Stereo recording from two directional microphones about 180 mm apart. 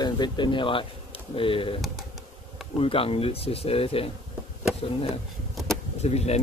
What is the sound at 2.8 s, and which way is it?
Speech, 30° left (ahead or behind).